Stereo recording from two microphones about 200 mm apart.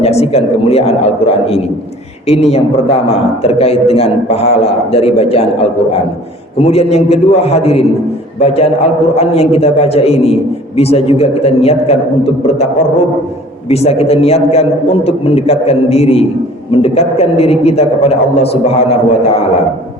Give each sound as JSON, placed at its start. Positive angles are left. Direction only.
{"t": 0.0, "sound": "a man's voice", "side_deg": 30}
{"t": 6.6, "sound": "a man's voice", "side_deg": 30}
{"t": 13.7, "sound": "a man's voice", "side_deg": 30}